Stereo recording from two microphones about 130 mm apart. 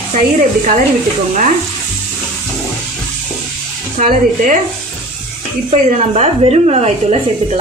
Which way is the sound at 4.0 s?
70° right (ahead or behind).